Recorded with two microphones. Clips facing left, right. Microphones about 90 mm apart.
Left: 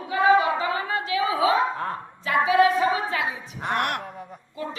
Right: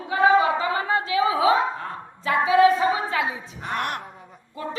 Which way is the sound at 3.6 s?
60° left (ahead or behind).